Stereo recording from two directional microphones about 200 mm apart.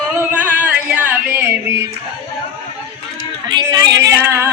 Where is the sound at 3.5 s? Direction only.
20° right (ahead or behind).